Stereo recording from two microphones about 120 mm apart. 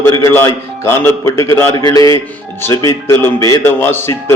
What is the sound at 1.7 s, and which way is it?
Speech, 35° left (ahead or behind).